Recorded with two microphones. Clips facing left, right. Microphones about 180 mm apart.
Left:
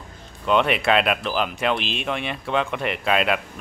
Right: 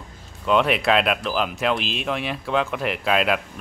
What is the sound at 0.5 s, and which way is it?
Speech, centre (ahead or behind).